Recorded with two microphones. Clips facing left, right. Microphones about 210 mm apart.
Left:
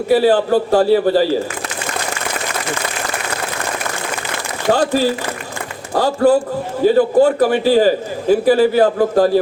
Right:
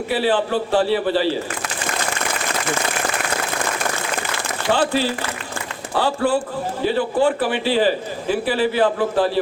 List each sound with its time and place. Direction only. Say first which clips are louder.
0.1 s a man's voice: left 7 dB; 40° left (ahead or behind)
4.7 s a man's voice: left 4 dB; 45° left (ahead or behind)